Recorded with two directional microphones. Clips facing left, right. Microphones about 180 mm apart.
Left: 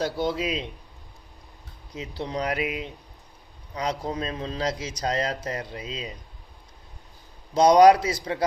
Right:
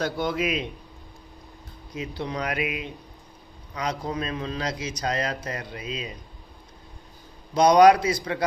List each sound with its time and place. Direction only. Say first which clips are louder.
0.0 s speech: even; 30° left (ahead or behind)
2.0 s speech: even; 30° left (ahead or behind)
3.8 s speech: even; 30° left (ahead or behind)
7.5 s speech: left 1 dB; 25° left (ahead or behind)